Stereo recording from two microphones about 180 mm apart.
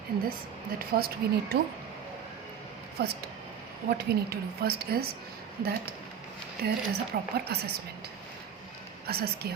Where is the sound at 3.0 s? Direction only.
65° right (ahead or behind).